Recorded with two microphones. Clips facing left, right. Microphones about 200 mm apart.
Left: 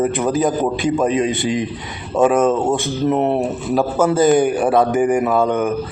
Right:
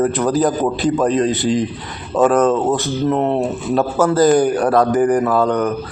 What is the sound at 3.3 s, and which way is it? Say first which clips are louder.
Speech: right 1 dB; centre (ahead or behind).